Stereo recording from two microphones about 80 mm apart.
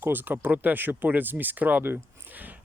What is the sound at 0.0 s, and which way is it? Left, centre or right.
Speech, right.